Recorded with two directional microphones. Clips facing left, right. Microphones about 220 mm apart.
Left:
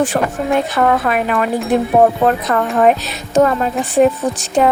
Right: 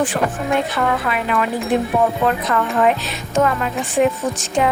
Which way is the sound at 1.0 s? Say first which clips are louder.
Left 4 dB; 45° left (ahead or behind).